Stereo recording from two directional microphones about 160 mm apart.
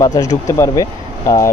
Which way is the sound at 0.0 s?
20° left (ahead or behind).